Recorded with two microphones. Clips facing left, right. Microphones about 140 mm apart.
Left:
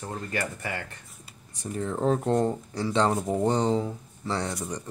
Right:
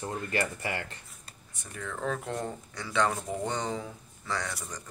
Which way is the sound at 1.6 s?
30° left (ahead or behind).